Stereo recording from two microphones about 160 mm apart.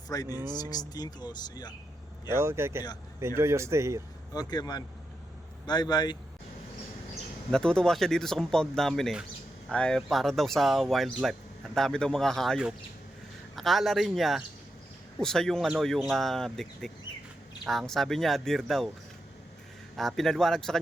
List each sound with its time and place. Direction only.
0.1 s speech: 25° left (ahead or behind)
2.3 s speech: 15° right (ahead or behind)
4.4 s speech: 25° left (ahead or behind)
7.5 s speech: 5° left (ahead or behind)
20.0 s speech: centre (ahead or behind)